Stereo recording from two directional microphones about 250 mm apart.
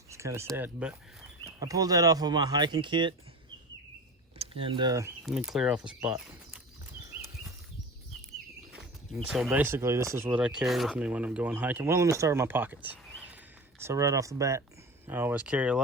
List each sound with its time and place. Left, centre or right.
0.1 s speech: centre
4.4 s speech: right
5.2 s speech: centre
8.7 s speech: centre